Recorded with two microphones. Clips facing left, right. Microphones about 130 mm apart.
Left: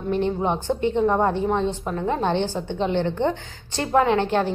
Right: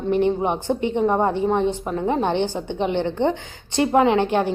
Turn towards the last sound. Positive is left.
turn(degrees=-15)  # may be behind; listen again after turning